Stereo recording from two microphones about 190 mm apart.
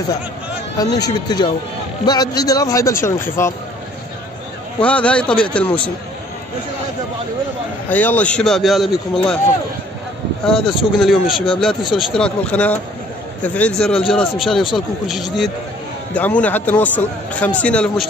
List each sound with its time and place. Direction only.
0.7 s a man's voice: 20° left (ahead or behind)
4.8 s a man's voice: 5° left (ahead or behind)
7.9 s a man's voice: 10° left (ahead or behind)
10.4 s a man's voice: centre (ahead or behind)